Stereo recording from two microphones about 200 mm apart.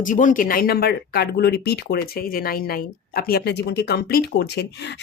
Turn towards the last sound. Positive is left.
turn(degrees=55)  # may be behind; listen again after turning